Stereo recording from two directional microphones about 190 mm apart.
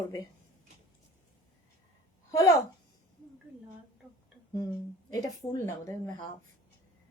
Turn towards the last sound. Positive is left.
turn(degrees=15)  # may be behind; listen again after turning